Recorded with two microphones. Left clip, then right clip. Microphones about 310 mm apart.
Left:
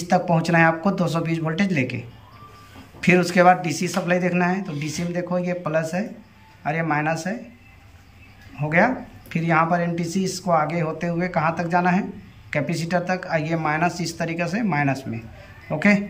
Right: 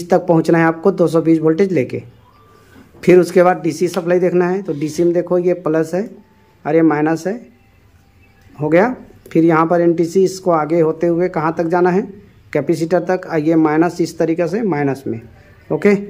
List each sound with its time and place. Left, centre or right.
0.0 s speech: centre
8.5 s speech: centre